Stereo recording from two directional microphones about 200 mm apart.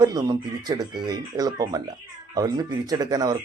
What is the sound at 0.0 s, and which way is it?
Speech, 20° right (ahead or behind).